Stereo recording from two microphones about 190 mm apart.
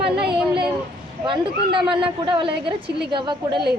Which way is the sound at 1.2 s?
25° right (ahead or behind).